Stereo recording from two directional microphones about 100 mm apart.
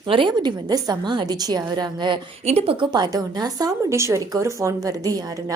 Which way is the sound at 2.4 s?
90° right.